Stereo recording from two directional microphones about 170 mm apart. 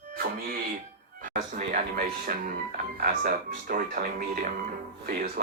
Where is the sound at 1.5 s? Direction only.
55° right (ahead or behind).